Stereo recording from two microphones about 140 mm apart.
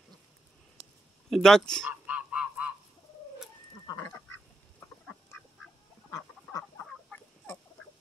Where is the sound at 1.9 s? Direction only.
10° right (ahead or behind).